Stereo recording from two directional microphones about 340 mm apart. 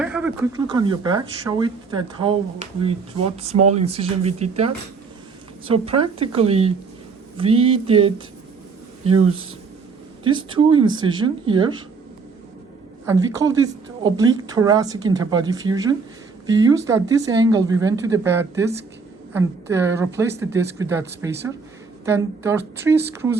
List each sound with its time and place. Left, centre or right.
0.0 s a woman's voice: centre
10.2 s a woman's voice: centre
13.1 s a woman's voice: centre